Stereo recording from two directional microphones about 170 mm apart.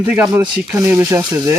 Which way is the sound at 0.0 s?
15° right (ahead or behind).